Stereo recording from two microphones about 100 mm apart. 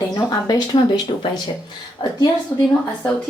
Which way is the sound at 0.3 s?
40° left (ahead or behind).